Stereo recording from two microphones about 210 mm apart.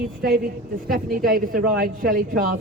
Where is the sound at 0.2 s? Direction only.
45° right (ahead or behind).